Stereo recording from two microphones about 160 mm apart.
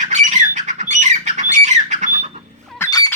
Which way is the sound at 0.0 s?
50° right (ahead or behind).